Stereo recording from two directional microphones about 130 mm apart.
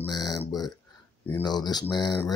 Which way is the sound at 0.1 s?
30° left (ahead or behind).